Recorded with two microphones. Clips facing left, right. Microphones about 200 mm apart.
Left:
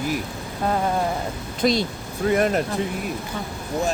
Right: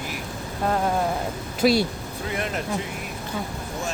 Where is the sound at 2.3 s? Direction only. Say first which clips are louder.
Left 10 dB; 45° left (ahead or behind).